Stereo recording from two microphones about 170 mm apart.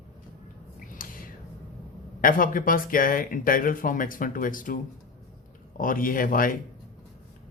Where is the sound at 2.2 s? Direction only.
55° left (ahead or behind).